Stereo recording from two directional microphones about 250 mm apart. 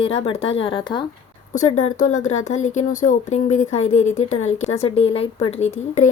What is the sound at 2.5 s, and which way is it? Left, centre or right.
Speech, left.